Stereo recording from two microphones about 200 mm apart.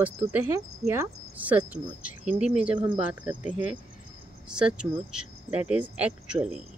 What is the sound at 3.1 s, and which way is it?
Speech, 5° right (ahead or behind).